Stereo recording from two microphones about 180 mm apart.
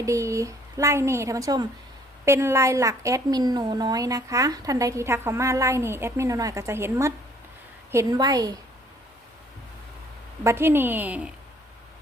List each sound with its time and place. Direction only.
0.0 s a woman's voice: 15° right (ahead or behind)
10.4 s a woman's voice: 15° right (ahead or behind)